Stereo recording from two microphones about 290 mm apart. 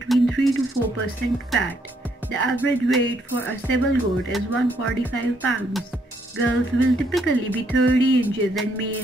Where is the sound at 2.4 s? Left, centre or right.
Centre.